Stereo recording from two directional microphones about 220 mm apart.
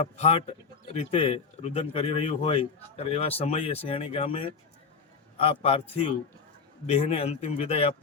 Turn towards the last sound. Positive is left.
turn(degrees=30)  # may be behind; listen again after turning